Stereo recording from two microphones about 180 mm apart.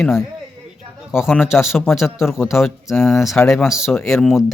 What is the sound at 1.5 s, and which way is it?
Speech, 15° left (ahead or behind).